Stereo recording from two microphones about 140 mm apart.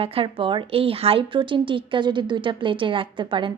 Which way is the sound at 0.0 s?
40° right (ahead or behind).